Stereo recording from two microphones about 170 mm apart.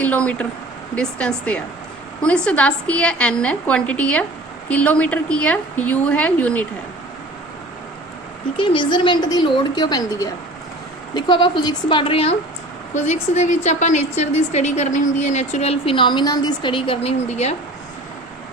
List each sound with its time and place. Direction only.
0.0 s a woman's voice: 10° left (ahead or behind)
8.5 s a woman's voice: 30° left (ahead or behind)